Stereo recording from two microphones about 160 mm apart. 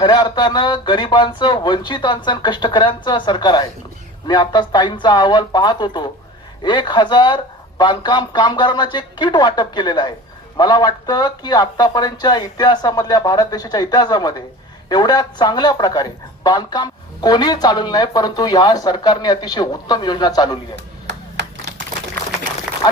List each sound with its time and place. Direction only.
0.0 s speech: 30° left (ahead or behind)